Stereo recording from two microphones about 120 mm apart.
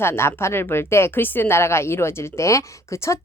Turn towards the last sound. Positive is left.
turn(degrees=25)  # may be behind; listen again after turning